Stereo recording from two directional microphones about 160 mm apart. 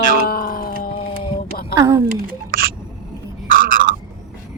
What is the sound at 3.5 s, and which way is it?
Frog, 60° right (ahead or behind).